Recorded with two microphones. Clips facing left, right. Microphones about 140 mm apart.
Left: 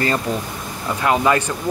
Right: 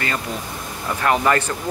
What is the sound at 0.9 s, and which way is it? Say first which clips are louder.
Speech: left 1 dB; 15° left (ahead or behind).